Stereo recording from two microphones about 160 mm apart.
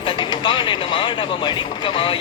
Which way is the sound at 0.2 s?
30° left (ahead or behind).